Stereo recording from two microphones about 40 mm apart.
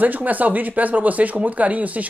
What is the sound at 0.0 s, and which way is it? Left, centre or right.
Speech, right.